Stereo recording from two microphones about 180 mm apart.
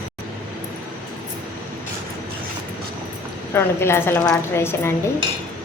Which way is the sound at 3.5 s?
15° left (ahead or behind).